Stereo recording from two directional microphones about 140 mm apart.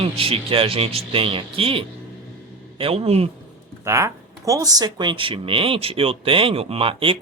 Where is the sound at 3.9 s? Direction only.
20° right (ahead or behind); by 7.2 s 40° right (ahead or behind).